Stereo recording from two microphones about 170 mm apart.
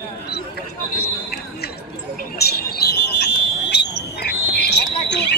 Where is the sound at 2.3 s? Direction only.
70° left (ahead or behind).